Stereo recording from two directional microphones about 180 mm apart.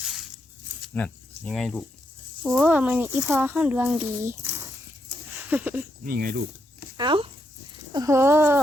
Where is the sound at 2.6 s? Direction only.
10° right (ahead or behind).